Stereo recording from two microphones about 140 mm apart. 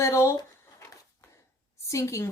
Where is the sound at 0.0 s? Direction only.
20° left (ahead or behind).